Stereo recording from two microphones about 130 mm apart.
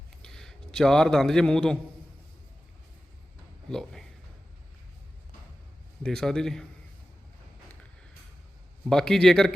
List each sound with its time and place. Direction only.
0.2 s a man's voice: 5° left (ahead or behind)
3.7 s a man's voice: 5° left (ahead or behind)
6.0 s a man's voice: 5° left (ahead or behind)
8.9 s a man's voice: 5° left (ahead or behind)